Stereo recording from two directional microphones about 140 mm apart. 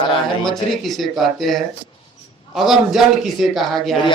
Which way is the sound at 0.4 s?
Centre (ahead or behind).